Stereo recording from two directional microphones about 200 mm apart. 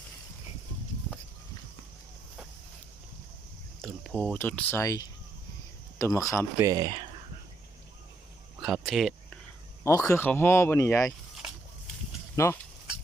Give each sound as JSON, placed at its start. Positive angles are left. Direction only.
{"t": 3.8, "sound": "a sound", "side_deg": 0}
{"t": 4.3, "sound": "speech", "side_deg": 5}
{"t": 6.6, "sound": "speech", "side_deg": -20}
{"t": 8.6, "sound": "speech", "side_deg": 0}
{"t": 9.8, "sound": "speech", "side_deg": 15}
{"t": 12.4, "sound": "speech", "side_deg": 15}